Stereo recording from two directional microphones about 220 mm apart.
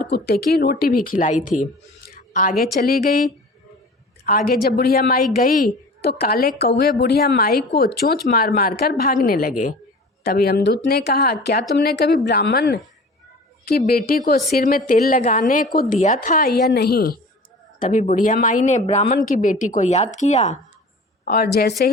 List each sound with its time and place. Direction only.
0.0 s a woman's voice: 45° left (ahead or behind)
2.0 s a sound: 40° left (ahead or behind)
2.8 s a woman's voice: 45° left (ahead or behind)
17.7 s a woman's voice: 35° left (ahead or behind)
21.2 s speech: 45° left (ahead or behind)